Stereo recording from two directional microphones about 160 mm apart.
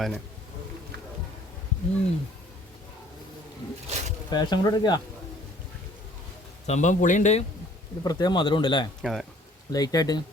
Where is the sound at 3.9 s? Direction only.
45° right (ahead or behind).